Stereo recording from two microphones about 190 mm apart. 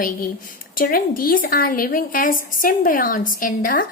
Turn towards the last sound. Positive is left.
turn(degrees=45)  # may be behind; listen again after turning